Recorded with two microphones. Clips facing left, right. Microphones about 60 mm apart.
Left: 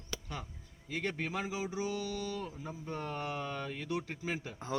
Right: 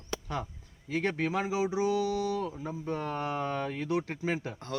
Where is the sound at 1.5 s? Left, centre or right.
Right.